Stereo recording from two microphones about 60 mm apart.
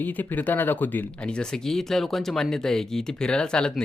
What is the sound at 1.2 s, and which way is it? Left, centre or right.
Speech, centre.